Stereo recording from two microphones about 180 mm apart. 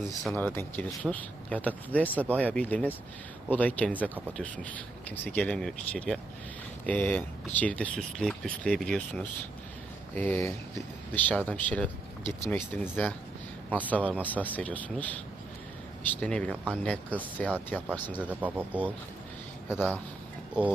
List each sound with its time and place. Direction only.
0.3 s speech: 10° left (ahead or behind)
16.2 s speech: 5° left (ahead or behind)
18.2 s speech: 10° right (ahead or behind)